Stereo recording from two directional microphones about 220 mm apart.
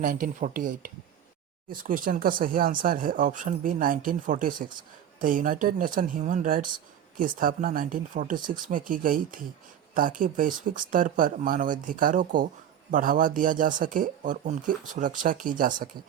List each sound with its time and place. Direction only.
0.0 s speech: 35° right (ahead or behind)